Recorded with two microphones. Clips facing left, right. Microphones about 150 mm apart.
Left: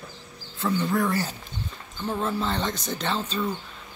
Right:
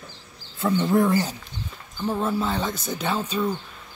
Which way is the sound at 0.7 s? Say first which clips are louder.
Right 5 dB; 25° right (ahead or behind).